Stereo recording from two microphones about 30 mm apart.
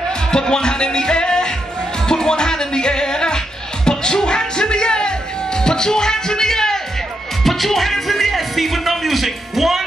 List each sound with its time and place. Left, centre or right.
0.3 s music: left
7.4 s speech: centre